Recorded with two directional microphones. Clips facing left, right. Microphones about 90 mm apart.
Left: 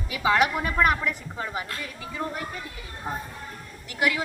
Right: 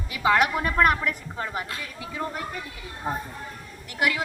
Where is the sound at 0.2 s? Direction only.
Centre (ahead or behind).